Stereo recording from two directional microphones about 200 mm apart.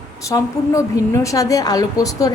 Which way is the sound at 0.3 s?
15° left (ahead or behind).